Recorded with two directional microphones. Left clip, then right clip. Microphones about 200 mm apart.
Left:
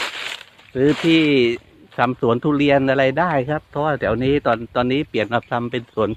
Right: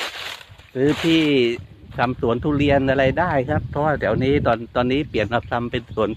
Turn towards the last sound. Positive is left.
turn(degrees=10)  # may be behind; listen again after turning